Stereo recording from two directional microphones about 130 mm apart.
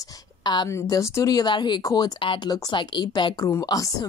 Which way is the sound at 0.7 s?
25° left (ahead or behind).